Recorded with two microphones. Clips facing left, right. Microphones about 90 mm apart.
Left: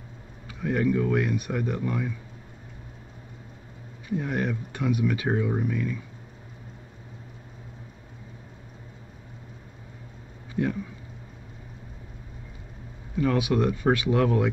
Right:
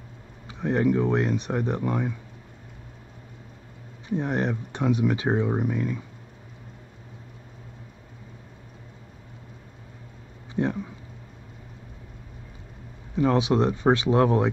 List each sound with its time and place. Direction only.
0.5 s speech: 25° right (ahead or behind)
4.2 s speech: 25° right (ahead or behind)
10.5 s a sound: 25° right (ahead or behind)
13.1 s speech: 25° right (ahead or behind)